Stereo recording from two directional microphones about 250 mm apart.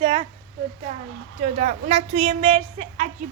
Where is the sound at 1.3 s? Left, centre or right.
Right.